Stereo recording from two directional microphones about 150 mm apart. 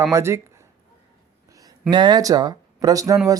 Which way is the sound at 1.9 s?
30° right (ahead or behind).